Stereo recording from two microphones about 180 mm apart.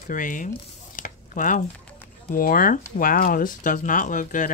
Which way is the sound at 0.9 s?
45° left (ahead or behind).